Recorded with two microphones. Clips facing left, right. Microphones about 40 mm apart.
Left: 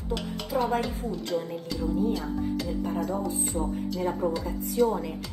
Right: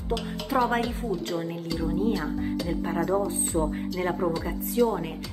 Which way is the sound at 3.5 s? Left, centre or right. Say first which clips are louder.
Right 6 dB; right.